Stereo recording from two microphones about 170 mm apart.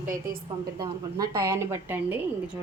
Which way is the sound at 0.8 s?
20° right (ahead or behind).